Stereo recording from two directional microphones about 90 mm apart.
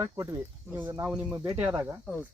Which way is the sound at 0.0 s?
30° right (ahead or behind).